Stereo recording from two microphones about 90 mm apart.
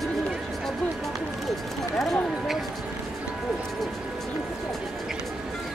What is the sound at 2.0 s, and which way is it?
Clip-clop, 5° left (ahead or behind).